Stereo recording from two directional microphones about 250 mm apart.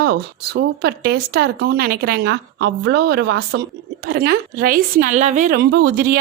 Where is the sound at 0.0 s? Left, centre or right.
Right.